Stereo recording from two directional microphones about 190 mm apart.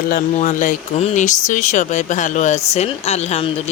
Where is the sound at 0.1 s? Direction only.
45° left (ahead or behind).